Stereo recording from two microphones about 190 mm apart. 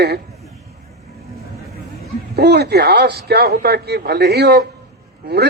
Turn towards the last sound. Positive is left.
turn(degrees=-60)  # may be behind; listen again after turning